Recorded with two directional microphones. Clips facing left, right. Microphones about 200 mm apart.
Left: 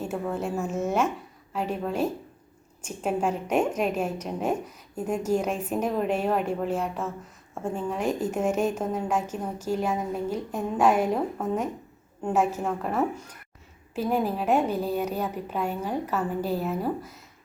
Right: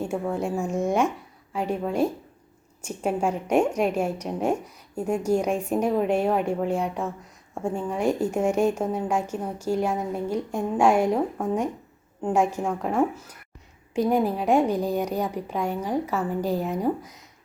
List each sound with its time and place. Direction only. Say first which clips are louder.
0.0 s a woman's voice: right 3 dB; 10° right (ahead or behind)